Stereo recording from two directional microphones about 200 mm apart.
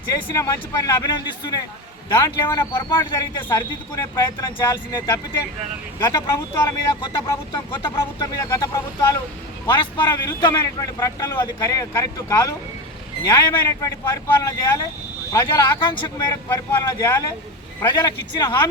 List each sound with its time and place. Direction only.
0.1 s a man's voice: 15° left (ahead or behind)